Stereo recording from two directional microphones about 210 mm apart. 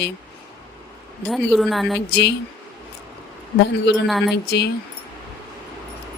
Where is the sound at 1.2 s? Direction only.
Centre (ahead or behind).